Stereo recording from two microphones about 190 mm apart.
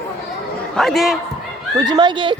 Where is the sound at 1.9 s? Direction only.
25° right (ahead or behind).